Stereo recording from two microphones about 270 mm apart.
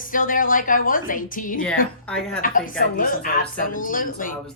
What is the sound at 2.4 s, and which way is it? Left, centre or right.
A woman's voice, left.